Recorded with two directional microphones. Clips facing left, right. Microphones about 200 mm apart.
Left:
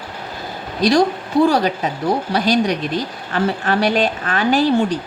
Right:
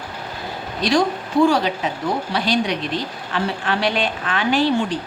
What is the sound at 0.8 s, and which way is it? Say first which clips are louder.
A woman's voice: left 4 dB; 40° left (ahead or behind).